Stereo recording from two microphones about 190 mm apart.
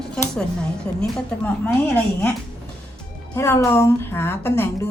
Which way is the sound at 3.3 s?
15° left (ahead or behind).